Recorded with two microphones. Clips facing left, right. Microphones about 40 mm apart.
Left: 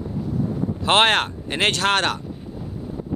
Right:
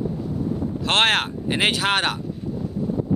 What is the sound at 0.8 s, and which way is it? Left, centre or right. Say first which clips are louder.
Speech: left 3 dB; centre.